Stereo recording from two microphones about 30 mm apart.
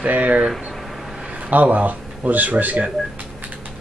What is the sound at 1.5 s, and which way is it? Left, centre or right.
Speech, right.